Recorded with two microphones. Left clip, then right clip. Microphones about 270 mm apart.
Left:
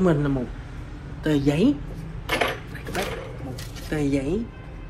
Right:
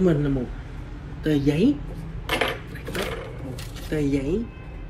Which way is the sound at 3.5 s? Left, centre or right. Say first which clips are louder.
Right 1 dB; centre.